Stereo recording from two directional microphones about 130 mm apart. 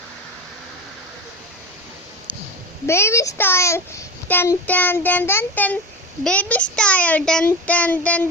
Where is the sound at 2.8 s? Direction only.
20° left (ahead or behind).